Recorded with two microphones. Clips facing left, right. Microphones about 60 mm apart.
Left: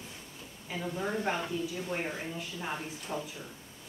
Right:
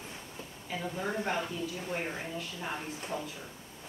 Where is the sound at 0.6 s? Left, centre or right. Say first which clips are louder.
Left 1 dB; centre.